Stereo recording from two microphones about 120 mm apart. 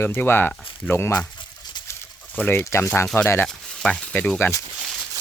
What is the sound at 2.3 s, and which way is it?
Speech, 15° left (ahead or behind).